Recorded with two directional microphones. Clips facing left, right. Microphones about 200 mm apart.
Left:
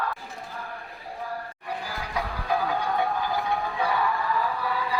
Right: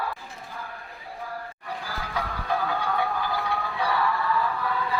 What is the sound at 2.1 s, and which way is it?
Music, 15° left (ahead or behind).